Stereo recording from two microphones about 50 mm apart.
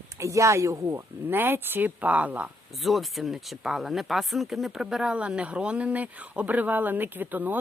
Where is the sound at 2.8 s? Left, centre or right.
Centre.